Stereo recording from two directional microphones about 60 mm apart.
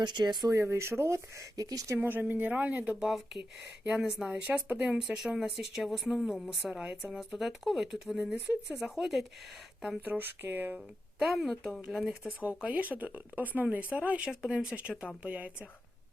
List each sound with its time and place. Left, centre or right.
0.4 s speech: right
1.5 s speech: right
2.0 s speech: right
3.1 s a woman's voice: centre
3.8 s speech: centre
4.3 s speech: right
4.9 s a woman's voice: centre
8.2 s speech: right
8.8 s speech: centre
10.0 s speech: right
10.8 s a woman's voice: centre
12.4 s speech: right
14.3 s speech: centre